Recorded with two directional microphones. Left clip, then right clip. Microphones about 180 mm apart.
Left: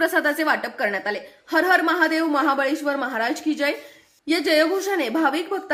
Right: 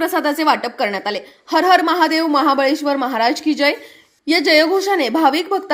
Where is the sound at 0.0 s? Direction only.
15° right (ahead or behind).